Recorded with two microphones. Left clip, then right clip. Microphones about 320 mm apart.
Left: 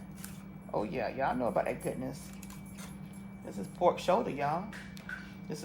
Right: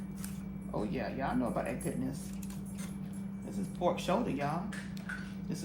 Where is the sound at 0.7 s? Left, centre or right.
Left.